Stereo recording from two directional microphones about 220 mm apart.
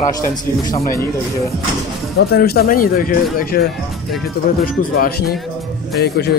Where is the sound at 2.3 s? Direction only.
45° left (ahead or behind).